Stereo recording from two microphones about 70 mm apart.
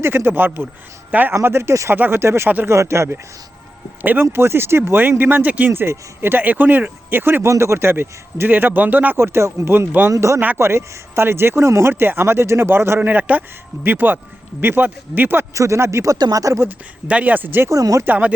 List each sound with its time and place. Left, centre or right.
0.0 s speech: right
1.4 s speech: right
1.9 s speech: right
4.0 s speech: right
7.4 s speech: right
10.1 s speech: right
13.0 s speech: right
15.5 s speech: right
16.1 s speech: right
16.4 s speech: right
16.6 s speech: right
17.7 s speech: right
18.0 s speech: right